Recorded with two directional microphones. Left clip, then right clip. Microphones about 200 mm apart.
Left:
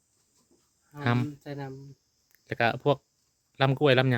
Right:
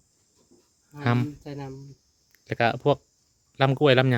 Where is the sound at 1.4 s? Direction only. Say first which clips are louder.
Right 1 dB; 10° left (ahead or behind).